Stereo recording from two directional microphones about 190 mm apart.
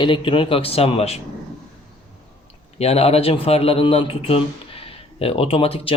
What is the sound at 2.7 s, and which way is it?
Speech, 35° left (ahead or behind).